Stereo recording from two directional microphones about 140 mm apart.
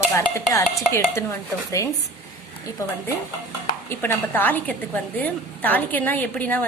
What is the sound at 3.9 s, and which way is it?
A woman's voice, 15° left (ahead or behind).